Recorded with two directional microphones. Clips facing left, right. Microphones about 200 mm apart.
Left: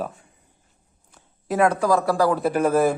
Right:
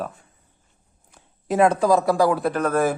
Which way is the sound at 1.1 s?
20° right (ahead or behind).